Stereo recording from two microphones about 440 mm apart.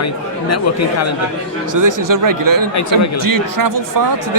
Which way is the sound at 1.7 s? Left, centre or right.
Right.